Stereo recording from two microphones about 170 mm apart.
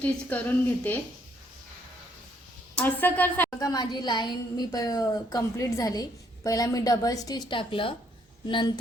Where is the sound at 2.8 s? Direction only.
10° left (ahead or behind).